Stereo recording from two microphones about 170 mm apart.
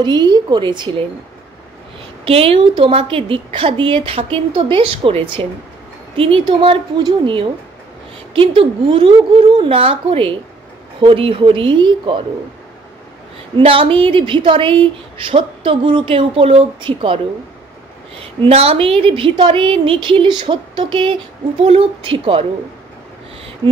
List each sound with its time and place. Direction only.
0.0 s a woman's voice: 25° right (ahead or behind)
2.2 s a woman's voice: 35° right (ahead or behind)
13.6 s a woman's voice: 30° right (ahead or behind)
18.2 s a woman's voice: 35° right (ahead or behind)